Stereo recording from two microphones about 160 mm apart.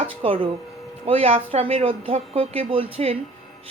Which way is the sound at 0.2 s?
30° right (ahead or behind).